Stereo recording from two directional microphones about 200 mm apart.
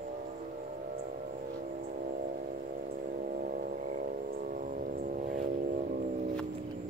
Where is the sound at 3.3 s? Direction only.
45° right (ahead or behind).